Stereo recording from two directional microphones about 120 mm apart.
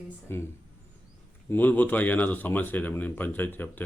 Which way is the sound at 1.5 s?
15° left (ahead or behind).